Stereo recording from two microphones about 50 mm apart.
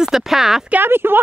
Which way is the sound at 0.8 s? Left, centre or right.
Right.